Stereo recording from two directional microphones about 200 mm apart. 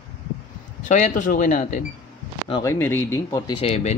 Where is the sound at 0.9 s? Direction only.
40° left (ahead or behind).